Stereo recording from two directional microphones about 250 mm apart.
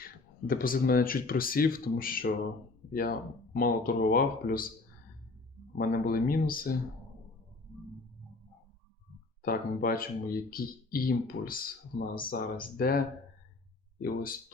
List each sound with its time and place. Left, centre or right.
0.0 s speech: left
5.7 s speech: left
9.4 s speech: left
14.0 s speech: left